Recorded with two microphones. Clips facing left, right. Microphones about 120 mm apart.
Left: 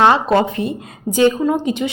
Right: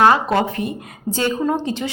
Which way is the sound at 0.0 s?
25° left (ahead or behind).